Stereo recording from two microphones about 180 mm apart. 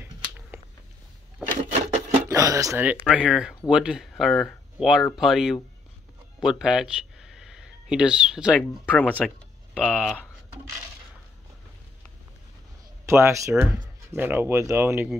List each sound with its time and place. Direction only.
1.6 s rub: 40° right (ahead or behind)
2.2 s speech: 15° right (ahead or behind)
8.5 s speech: 10° left (ahead or behind)
9.8 s speech: 5° right (ahead or behind)
13.0 s speech: 15° right (ahead or behind)